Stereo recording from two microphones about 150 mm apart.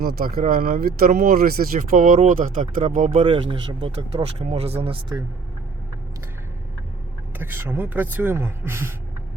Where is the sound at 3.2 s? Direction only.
35° right (ahead or behind).